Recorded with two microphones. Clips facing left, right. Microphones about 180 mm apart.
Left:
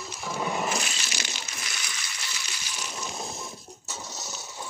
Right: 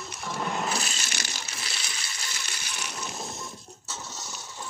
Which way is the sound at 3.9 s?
10° left (ahead or behind).